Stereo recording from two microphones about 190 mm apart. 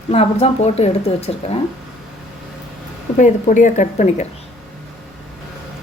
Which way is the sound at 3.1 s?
40° left (ahead or behind).